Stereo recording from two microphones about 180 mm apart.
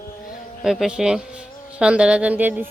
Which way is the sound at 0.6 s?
Centre (ahead or behind).